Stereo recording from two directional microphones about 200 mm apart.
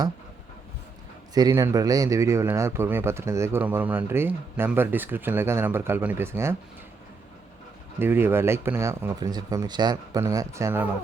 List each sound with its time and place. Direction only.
1.3 s a man's voice: 20° right (ahead or behind)
7.9 s a man's voice: 10° right (ahead or behind)